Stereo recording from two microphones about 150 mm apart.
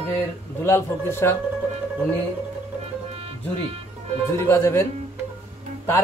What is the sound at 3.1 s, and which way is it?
Music, 40° right (ahead or behind).